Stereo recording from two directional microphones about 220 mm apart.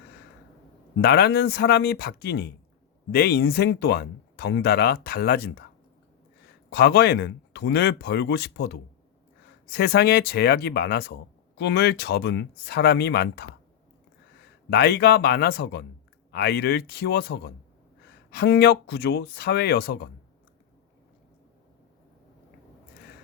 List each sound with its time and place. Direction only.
1.0 s speech: 45° left (ahead or behind)
6.7 s speech: 45° left (ahead or behind)
14.7 s speech: 45° left (ahead or behind)